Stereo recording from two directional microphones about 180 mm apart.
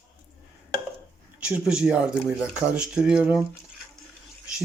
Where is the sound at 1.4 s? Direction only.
5° right (ahead or behind).